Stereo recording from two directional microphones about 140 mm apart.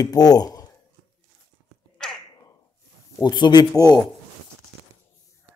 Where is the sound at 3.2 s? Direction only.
30° left (ahead or behind).